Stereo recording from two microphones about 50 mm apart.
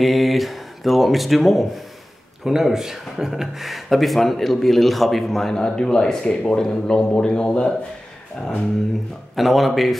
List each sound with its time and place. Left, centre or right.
0.0 s a man's voice: centre
8.4 s a sound: centre
9.3 s speech: centre